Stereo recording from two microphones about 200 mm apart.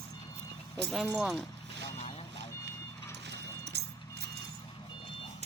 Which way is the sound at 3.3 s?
55° right (ahead or behind).